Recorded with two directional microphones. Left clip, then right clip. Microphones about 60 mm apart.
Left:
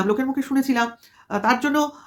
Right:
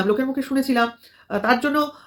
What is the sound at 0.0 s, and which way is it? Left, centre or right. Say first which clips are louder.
Speech: right 1 dB; left.